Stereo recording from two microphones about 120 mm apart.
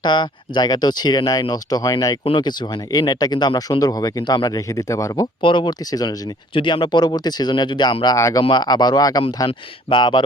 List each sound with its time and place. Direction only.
0.0 s speech: 40° left (ahead or behind)
2.2 s speech: 40° left (ahead or behind); by 5.2 s 25° left (ahead or behind)
5.2 s speech: 40° left (ahead or behind)
6.5 s speech: 45° left (ahead or behind)
8.0 s speech: 30° left (ahead or behind)
9.5 s speech: 45° left (ahead or behind)